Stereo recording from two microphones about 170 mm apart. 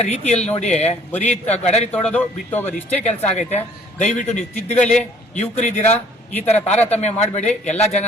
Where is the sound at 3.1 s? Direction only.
40° left (ahead or behind).